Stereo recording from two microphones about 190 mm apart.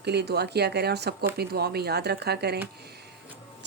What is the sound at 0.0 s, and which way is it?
A woman's voice, 60° right (ahead or behind).